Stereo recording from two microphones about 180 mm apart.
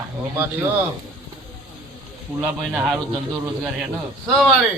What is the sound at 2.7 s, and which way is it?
Speech, 5° right (ahead or behind).